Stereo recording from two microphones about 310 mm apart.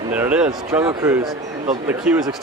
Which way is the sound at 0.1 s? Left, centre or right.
Centre.